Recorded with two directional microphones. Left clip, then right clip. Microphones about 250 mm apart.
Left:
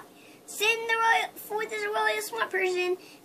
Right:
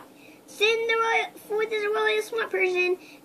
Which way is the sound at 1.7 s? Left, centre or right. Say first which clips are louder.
Right 2 dB; centre.